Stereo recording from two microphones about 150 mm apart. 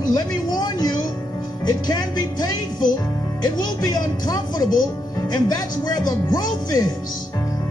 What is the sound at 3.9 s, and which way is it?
Music, 25° left (ahead or behind).